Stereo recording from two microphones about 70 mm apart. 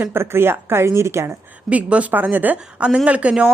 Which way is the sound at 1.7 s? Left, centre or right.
Right.